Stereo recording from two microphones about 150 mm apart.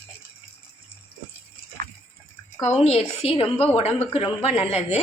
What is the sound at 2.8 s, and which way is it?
A woman's voice, 40° left (ahead or behind).